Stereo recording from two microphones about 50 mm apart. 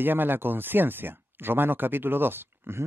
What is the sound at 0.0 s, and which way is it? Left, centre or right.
Speech, right.